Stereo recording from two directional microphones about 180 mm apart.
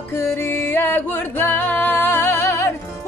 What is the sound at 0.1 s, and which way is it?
Music, 15° left (ahead or behind).